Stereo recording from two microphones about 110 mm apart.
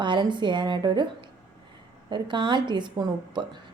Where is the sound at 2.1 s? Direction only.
45° right (ahead or behind).